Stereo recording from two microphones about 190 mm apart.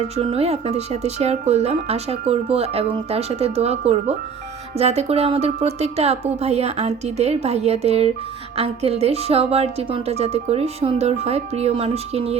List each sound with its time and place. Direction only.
0.2 s speech: 30° right (ahead or behind)